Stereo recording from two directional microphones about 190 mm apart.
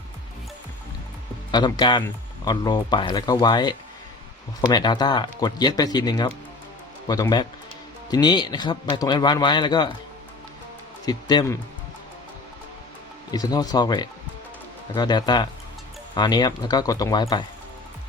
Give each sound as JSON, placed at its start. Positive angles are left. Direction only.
{"t": 1.5, "sound": "speech", "side_deg": 20}
{"t": 11.0, "sound": "speech", "side_deg": 20}
{"t": 13.3, "sound": "speech", "side_deg": 20}